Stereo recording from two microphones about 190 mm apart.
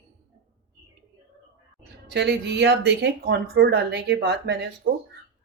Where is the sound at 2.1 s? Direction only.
65° right (ahead or behind).